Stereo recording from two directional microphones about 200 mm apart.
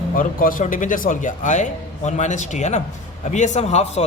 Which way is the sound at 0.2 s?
45° left (ahead or behind).